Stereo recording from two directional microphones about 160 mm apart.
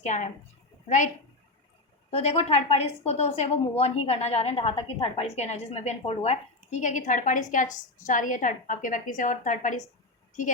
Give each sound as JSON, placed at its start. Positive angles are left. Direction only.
{"t": 0.0, "sound": "a woman's voice", "side_deg": 50}
{"t": 2.0, "sound": "a woman's voice", "side_deg": 40}